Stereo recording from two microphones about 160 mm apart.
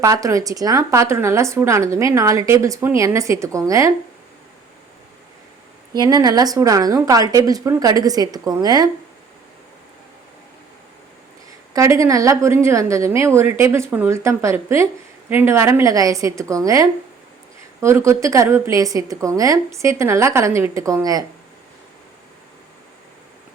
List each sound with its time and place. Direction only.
0.0 s speech: 20° right (ahead or behind)
5.9 s speech: 25° right (ahead or behind)
11.7 s a woman's voice: 20° right (ahead or behind)